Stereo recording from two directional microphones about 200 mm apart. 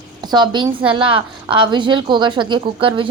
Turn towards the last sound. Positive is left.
turn(degrees=-25)  # may be behind; listen again after turning